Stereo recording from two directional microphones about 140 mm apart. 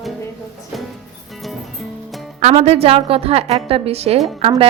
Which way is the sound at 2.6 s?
45° right (ahead or behind).